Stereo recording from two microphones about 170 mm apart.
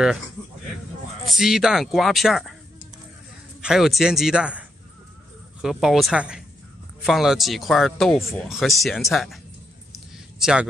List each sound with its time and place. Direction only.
1.3 s speech: centre (ahead or behind)
3.6 s speech: centre (ahead or behind)
8.2 s speech: 15° left (ahead or behind)
8.5 s speech: centre (ahead or behind)
9.9 s a sound: 5° right (ahead or behind)